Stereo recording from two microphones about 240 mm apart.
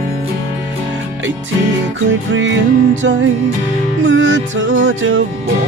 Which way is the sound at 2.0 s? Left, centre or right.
Right.